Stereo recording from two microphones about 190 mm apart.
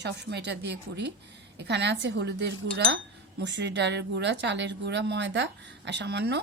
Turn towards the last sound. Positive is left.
turn(degrees=-60)  # may be behind; listen again after turning